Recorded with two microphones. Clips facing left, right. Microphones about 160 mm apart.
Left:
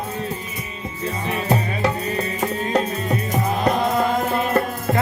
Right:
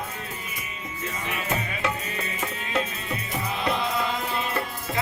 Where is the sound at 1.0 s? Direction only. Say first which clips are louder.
Left 7 dB; 35° left (ahead or behind); by 4.9 s 50° left (ahead or behind).